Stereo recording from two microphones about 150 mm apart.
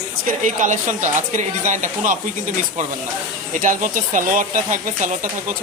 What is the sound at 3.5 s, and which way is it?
Speech, 60° right (ahead or behind).